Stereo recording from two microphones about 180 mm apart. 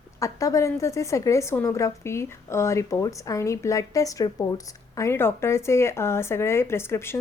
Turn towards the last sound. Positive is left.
turn(degrees=15)  # may be behind; listen again after turning